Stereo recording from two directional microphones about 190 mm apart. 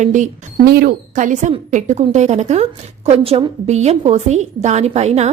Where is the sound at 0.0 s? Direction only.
40° right (ahead or behind).